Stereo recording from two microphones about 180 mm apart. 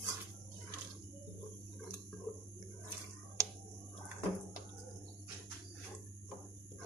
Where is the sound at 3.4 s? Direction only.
15° right (ahead or behind).